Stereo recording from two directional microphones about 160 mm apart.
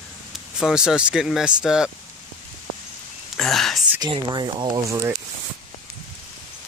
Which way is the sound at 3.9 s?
30° right (ahead or behind).